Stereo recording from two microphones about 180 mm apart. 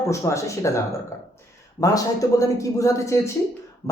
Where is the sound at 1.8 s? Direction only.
20° left (ahead or behind).